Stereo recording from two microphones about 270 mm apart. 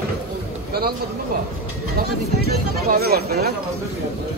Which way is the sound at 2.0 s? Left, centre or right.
Right.